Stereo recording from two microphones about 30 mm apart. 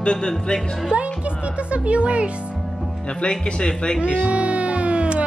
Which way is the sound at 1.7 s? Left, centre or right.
Right.